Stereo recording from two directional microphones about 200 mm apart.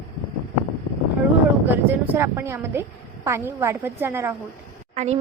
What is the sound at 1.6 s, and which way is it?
A woman's voice, 10° right (ahead or behind).